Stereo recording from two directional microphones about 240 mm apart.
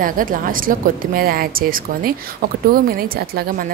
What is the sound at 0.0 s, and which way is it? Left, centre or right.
A woman's voice, right.